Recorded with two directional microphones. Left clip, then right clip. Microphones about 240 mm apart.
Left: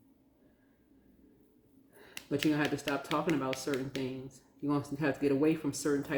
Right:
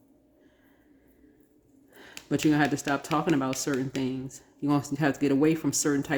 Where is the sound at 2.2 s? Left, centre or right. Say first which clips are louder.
Even; centre.